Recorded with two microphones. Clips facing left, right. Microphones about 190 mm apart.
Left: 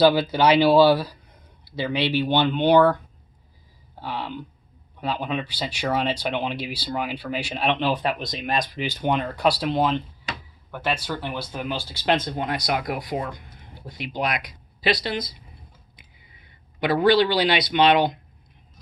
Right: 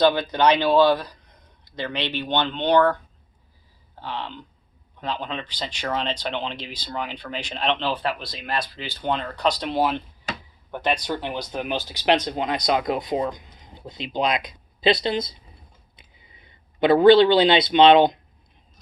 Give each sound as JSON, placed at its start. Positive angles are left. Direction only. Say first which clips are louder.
{"t": 0.0, "sound": "speech", "louder": "left 1 dB", "side_deg": 10}
{"t": 4.0, "sound": "speech", "louder": "left 2 dB", "side_deg": 10}
{"t": 10.7, "sound": "speech", "louder": "right 2 dB", "side_deg": -20}
{"t": 16.8, "sound": "speech", "louder": "right 5 dB", "side_deg": -25}